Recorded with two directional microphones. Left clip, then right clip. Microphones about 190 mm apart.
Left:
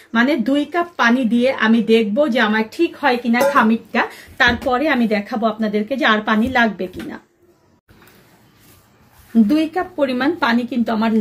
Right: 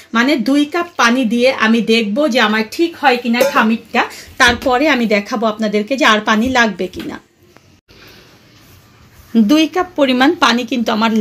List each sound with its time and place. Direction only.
0.1 s speech: 30° right (ahead or behind)
3.0 s speech: 20° right (ahead or behind)
9.3 s speech: 30° right (ahead or behind)